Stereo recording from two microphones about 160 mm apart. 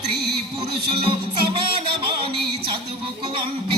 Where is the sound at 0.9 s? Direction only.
35° right (ahead or behind).